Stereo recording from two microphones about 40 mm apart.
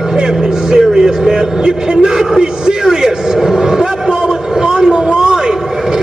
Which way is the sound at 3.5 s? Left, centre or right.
Centre.